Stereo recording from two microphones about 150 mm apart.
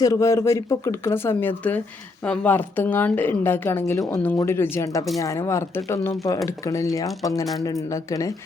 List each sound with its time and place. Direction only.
0.0 s speech: 20° left (ahead or behind)